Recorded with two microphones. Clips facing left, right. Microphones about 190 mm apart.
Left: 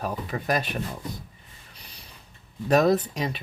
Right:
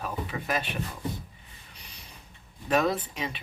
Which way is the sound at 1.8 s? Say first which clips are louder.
Left 2 dB; 35° left (ahead or behind).